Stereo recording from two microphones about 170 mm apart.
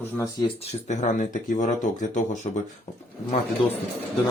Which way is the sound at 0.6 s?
45° left (ahead or behind).